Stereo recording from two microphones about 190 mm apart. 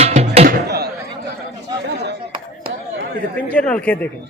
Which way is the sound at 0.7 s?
60° right (ahead or behind).